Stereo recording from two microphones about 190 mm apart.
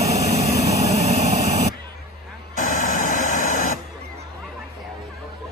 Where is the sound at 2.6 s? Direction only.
45° left (ahead or behind).